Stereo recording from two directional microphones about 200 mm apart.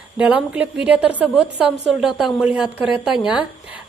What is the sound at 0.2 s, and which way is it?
A woman's voice, 5° right (ahead or behind).